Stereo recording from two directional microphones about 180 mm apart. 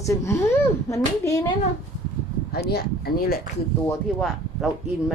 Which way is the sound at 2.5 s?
60° left (ahead or behind).